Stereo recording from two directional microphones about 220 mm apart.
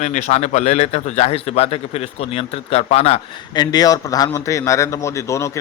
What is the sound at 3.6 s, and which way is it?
A man's voice, 15° left (ahead or behind).